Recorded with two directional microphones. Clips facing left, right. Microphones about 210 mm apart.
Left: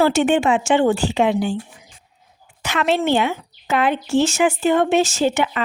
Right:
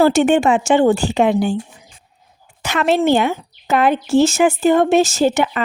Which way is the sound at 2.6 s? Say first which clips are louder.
Right 3 dB; 45° right (ahead or behind).